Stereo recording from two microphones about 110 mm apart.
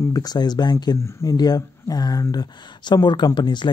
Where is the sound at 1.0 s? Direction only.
25° left (ahead or behind).